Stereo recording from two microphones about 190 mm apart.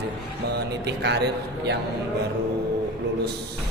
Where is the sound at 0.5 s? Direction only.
65° right (ahead or behind).